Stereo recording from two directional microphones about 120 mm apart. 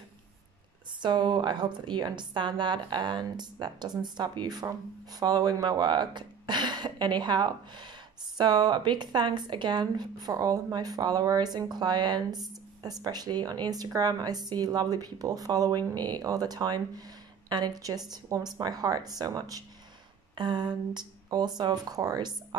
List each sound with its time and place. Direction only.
1.0 s speech: 40° right (ahead or behind)